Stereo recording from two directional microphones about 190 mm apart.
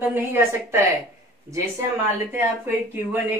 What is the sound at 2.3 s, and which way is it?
Speech, 10° right (ahead or behind).